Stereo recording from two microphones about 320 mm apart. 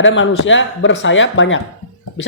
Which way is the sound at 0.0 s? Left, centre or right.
Left.